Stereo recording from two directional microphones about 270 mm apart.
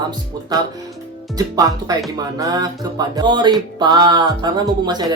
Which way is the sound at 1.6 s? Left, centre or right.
Centre.